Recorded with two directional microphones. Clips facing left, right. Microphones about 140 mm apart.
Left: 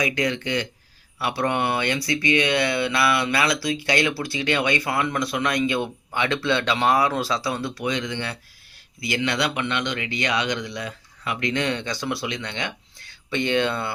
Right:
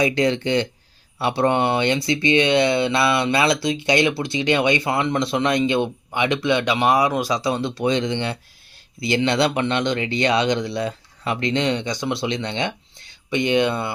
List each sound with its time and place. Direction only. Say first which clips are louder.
0.0 s speech: right 5 dB; 30° right (ahead or behind)